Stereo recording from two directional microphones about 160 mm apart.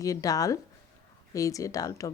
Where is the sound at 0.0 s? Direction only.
20° left (ahead or behind).